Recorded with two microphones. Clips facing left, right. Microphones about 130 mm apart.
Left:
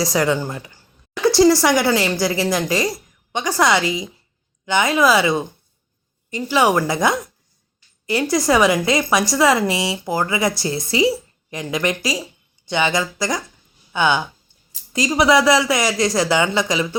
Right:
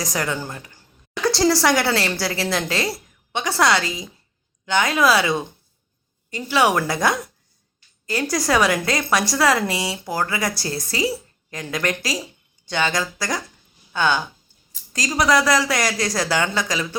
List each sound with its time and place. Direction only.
0.0 s speech: 15° left (ahead or behind)
1.2 s a sound: centre (ahead or behind)
1.6 s speech: 5° left (ahead or behind)
3.3 s speech: centre (ahead or behind)
3.8 s speech: 15° left (ahead or behind)
4.6 s speech: 5° left (ahead or behind)
8.4 s speech: centre (ahead or behind)
8.8 s speech: 15° left (ahead or behind)
9.3 s a woman's voice: centre (ahead or behind); by 11.1 s 20° left (ahead or behind)
11.7 s speech: 10° left (ahead or behind)
15.4 s a woman's voice: 20° left (ahead or behind)
15.7 s speech: 5° left (ahead or behind)
16.0 s speech: 20° left (ahead or behind)